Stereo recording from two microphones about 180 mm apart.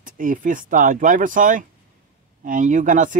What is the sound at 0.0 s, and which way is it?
Speech, 45° right (ahead or behind).